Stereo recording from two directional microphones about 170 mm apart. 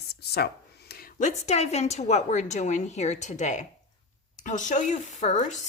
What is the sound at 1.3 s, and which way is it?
Speech, 40° left (ahead or behind).